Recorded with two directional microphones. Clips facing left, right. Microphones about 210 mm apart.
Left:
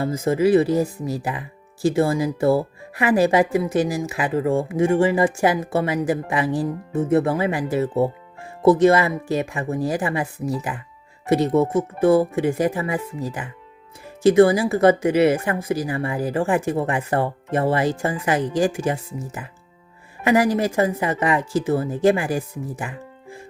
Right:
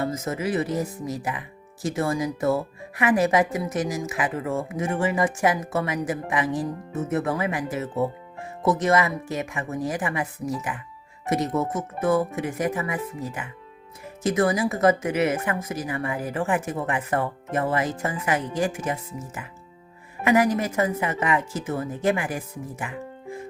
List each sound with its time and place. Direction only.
0.0 s speech: 30° left (ahead or behind)